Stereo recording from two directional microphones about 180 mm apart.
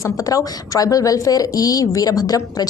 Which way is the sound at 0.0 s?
20° left (ahead or behind).